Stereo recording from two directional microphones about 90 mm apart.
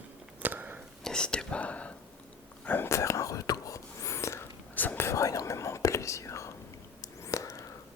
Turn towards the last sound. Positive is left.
turn(degrees=35)  # may be behind; listen again after turning